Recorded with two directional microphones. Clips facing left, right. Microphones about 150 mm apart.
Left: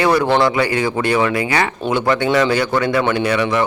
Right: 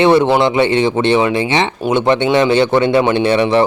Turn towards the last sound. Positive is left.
turn(degrees=-30)  # may be behind; listen again after turning